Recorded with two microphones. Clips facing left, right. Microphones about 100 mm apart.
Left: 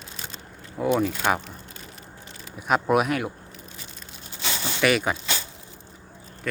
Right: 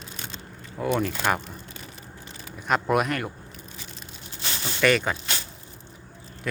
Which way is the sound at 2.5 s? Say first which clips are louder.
Left 2 dB; 5° left (ahead or behind).